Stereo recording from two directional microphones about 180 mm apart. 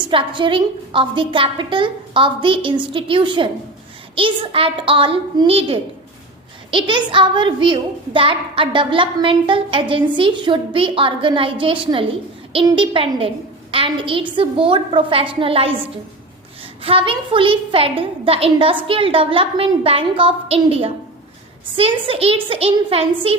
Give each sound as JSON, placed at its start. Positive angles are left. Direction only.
{"t": 0.0, "sound": "a child's voice", "side_deg": -25}